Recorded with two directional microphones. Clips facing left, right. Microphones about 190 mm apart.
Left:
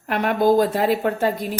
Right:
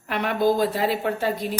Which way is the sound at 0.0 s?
50° left (ahead or behind).